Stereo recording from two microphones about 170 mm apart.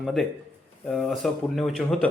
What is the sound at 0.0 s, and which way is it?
Speech, centre (ahead or behind).